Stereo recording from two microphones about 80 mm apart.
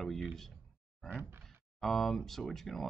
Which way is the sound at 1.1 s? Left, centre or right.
Right.